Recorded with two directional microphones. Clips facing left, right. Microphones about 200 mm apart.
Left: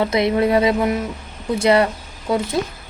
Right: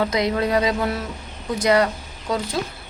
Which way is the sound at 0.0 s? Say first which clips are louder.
Left 4 dB; 25° left (ahead or behind).